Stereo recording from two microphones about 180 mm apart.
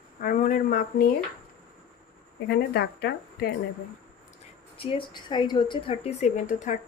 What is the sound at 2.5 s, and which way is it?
Speech, 65° left (ahead or behind).